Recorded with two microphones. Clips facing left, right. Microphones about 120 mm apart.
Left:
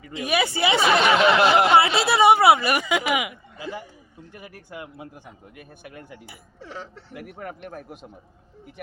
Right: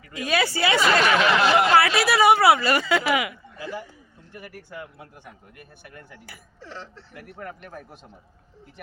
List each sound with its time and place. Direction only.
0.1 s speech: 20° left (ahead or behind)